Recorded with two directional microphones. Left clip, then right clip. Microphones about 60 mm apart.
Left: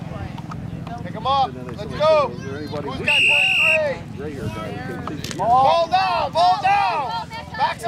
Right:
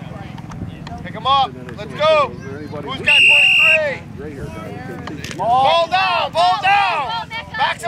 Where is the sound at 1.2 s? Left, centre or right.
Right.